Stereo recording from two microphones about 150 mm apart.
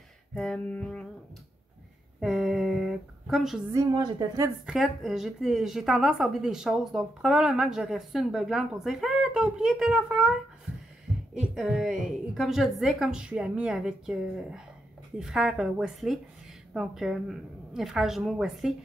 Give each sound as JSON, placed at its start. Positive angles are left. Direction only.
{"t": 0.3, "sound": "music", "side_deg": 5}
{"t": 2.1, "sound": "a sound", "side_deg": 0}
{"t": 3.7, "sound": "a woman's voice", "side_deg": -25}
{"t": 4.6, "sound": "a woman's voice", "side_deg": 0}